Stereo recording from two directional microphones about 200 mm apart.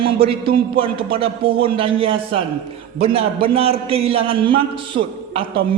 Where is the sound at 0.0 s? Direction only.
25° right (ahead or behind).